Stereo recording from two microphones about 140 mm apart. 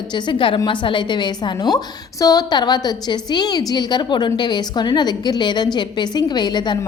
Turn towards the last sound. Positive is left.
turn(degrees=30)  # may be behind; listen again after turning